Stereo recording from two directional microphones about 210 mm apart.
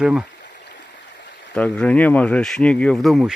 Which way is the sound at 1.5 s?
5° left (ahead or behind).